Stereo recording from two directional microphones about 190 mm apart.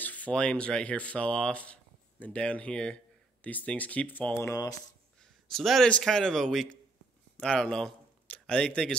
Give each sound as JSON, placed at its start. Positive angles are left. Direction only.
{"t": 0.0, "sound": "speech", "side_deg": 10}
{"t": 5.2, "sound": "a man's voice", "side_deg": 0}